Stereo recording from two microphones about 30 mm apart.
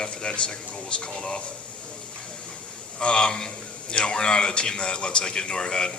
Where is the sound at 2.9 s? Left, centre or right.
Left.